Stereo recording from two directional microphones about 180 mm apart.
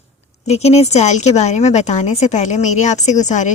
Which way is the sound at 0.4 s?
35° left (ahead or behind).